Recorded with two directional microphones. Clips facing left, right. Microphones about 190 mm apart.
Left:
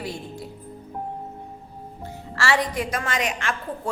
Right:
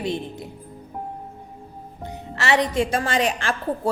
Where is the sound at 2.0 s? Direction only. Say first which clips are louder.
Even; 20° right (ahead or behind).